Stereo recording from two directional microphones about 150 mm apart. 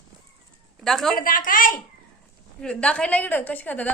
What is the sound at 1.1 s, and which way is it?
Speech, 65° left (ahead or behind).